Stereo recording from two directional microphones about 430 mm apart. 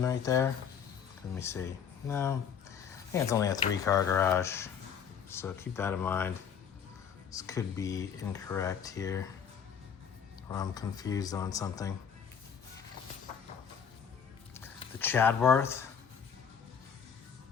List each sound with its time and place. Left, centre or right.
0.0 s speech: centre
10.5 s speech: centre
14.5 s speech: centre